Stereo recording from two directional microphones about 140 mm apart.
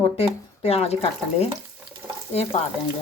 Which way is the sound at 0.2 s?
45° left (ahead or behind).